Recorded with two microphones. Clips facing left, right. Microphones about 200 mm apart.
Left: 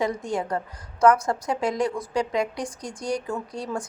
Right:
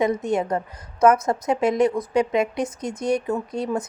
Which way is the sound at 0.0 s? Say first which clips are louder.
Right 5 dB; 20° right (ahead or behind).